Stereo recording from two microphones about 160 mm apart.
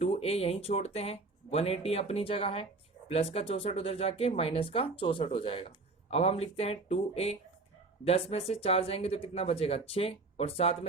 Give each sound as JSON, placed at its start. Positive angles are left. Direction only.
{"t": 0.0, "sound": "speech", "side_deg": 40}